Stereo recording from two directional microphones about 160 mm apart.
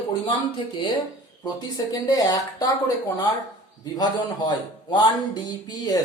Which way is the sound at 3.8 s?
25° left (ahead or behind).